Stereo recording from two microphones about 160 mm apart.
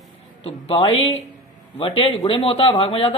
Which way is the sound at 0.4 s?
35° left (ahead or behind).